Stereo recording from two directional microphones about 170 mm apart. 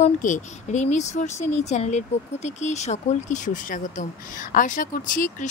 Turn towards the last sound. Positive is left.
turn(degrees=50)  # may be behind; listen again after turning